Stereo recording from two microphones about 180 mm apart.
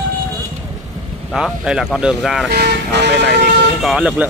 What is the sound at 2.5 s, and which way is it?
Speech, 65° right (ahead or behind).